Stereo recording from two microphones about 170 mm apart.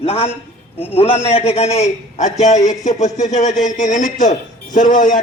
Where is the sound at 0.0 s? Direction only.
35° left (ahead or behind).